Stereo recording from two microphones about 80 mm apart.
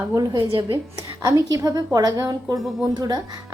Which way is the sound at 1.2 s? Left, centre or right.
Right.